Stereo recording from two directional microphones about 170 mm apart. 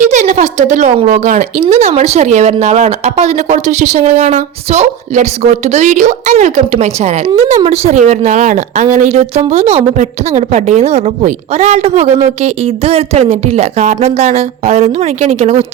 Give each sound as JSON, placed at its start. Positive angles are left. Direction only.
{"t": 0.0, "sound": "a woman's voice", "side_deg": -45}